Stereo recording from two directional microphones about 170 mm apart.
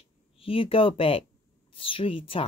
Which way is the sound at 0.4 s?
35° left (ahead or behind).